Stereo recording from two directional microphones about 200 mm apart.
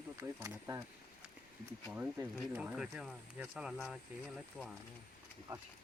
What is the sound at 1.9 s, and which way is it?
Speech, 10° right (ahead or behind).